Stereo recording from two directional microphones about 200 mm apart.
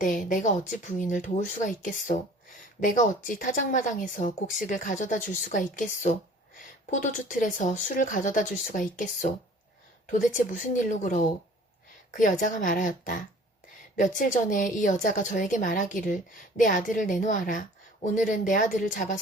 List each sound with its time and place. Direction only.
0.0 s speech: 40° left (ahead or behind)